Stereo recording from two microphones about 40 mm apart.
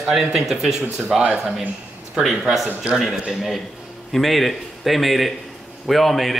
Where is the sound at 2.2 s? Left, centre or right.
Centre.